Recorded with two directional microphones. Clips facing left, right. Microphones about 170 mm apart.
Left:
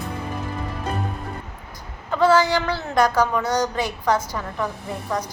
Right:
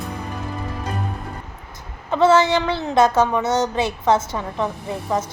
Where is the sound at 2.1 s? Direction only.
25° right (ahead or behind).